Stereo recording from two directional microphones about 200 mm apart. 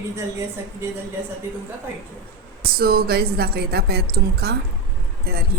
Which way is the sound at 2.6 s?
50° right (ahead or behind).